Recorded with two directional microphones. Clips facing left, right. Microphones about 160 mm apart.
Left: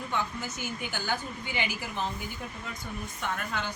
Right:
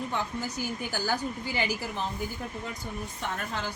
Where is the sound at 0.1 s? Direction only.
35° right (ahead or behind).